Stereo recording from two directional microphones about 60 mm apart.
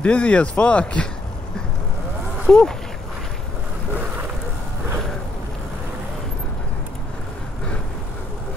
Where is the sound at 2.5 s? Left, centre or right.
Left.